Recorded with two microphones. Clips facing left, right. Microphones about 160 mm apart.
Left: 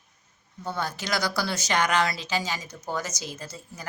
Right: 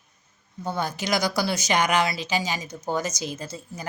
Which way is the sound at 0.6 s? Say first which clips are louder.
Right 3 dB; 15° right (ahead or behind).